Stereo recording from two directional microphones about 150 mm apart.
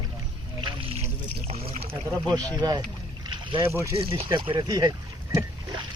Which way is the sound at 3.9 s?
40° right (ahead or behind).